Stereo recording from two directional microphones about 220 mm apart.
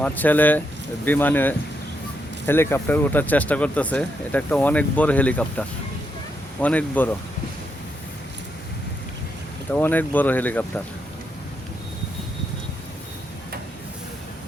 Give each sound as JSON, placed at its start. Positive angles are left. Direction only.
{"t": 0.0, "sound": "speech", "side_deg": 5}
{"t": 9.7, "sound": "speech", "side_deg": 10}